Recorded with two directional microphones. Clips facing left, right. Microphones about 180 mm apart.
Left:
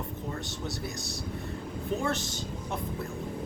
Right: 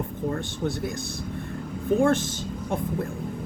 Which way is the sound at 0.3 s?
55° right (ahead or behind).